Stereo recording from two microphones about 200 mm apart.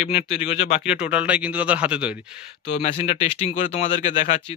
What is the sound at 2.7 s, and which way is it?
Speech, 30° left (ahead or behind).